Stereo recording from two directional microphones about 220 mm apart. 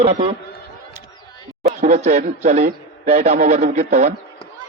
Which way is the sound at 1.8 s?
30° right (ahead or behind).